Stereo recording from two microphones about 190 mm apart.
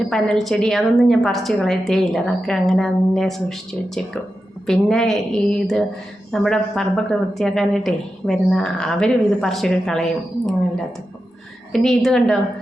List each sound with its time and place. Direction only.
0.1 s a woman's voice: centre (ahead or behind)
11.7 s a woman's voice: centre (ahead or behind)